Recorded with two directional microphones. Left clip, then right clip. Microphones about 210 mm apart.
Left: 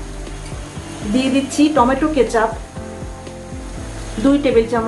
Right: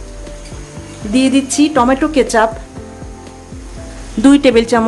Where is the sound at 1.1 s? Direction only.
35° right (ahead or behind).